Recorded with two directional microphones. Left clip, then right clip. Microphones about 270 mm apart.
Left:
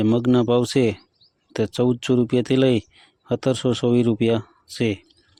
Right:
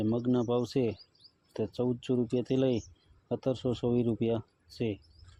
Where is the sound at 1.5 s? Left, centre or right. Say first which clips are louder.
Left 11 dB; left.